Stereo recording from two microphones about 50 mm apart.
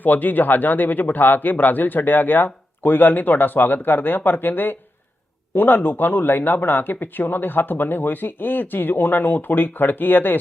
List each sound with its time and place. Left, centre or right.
0.0 s speech: left